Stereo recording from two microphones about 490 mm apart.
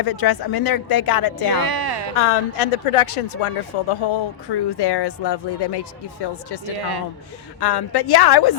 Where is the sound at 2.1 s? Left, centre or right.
Left.